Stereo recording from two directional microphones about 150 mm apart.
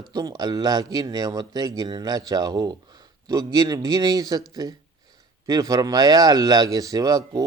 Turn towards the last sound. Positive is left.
turn(degrees=-25)  # may be behind; listen again after turning